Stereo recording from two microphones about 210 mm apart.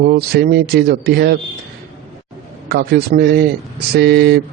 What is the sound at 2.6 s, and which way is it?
Speech, 50° right (ahead or behind).